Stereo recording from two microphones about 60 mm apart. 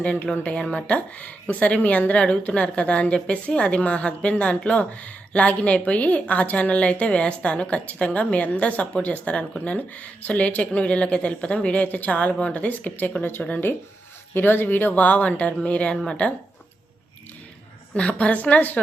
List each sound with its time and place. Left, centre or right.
0.0 s a woman's voice: left
0.6 s speech: centre
0.9 s a woman's voice: left
13.4 s speech: centre
14.3 s a woman's voice: left
18.2 s a woman's voice: left